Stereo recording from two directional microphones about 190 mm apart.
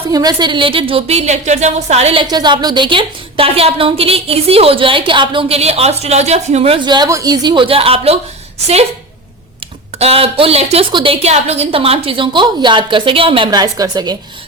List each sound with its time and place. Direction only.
0.1 s a woman's voice: 20° right (ahead or behind)
2.2 s a woman's voice: 20° right (ahead or behind)
10.0 s a woman's voice: 30° right (ahead or behind)